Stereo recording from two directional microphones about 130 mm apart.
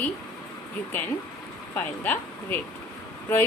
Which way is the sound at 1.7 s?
15° left (ahead or behind).